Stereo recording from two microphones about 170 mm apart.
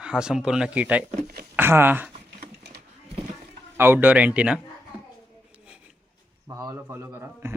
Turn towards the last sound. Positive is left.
turn(degrees=-15)  # may be behind; listen again after turning